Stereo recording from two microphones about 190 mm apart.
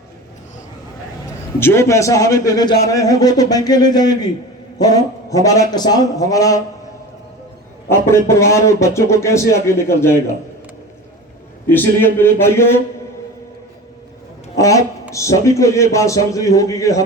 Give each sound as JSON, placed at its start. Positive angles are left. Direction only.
{"t": 1.5, "sound": "a man's voice", "side_deg": 15}
{"t": 7.9, "sound": "a man's voice", "side_deg": 15}
{"t": 11.7, "sound": "a man's voice", "side_deg": 10}
{"t": 15.1, "sound": "a man's voice", "side_deg": 15}